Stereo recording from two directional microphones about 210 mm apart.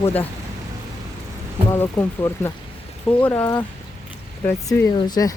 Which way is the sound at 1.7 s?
10° left (ahead or behind).